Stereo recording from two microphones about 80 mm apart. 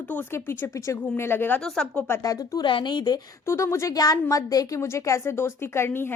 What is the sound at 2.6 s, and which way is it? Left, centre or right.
Speech, left.